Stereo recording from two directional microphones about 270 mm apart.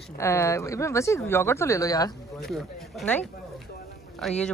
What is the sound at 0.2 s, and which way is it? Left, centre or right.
Speech, centre.